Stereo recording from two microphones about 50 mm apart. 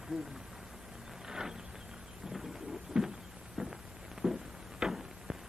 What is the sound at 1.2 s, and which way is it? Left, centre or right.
Vehicle, centre.